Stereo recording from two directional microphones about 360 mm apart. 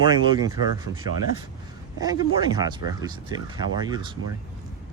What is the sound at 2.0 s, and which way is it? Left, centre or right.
Speech, centre.